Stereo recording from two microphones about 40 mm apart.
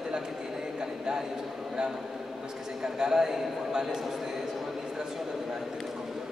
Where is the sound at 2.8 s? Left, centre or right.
Centre.